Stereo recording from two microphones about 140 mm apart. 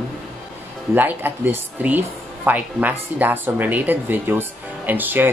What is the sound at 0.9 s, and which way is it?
Speech, 15° right (ahead or behind).